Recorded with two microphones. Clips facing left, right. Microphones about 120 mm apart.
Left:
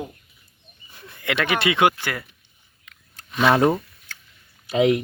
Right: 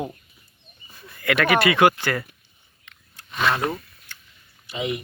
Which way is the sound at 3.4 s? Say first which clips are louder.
Left 6 dB; 60° left (ahead or behind).